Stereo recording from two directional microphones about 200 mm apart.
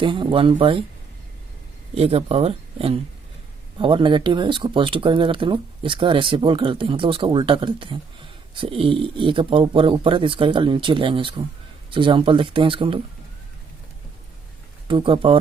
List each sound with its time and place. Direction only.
0.0 s speech: 25° right (ahead or behind)
2.0 s speech: 30° right (ahead or behind)
14.8 s speech: 25° right (ahead or behind)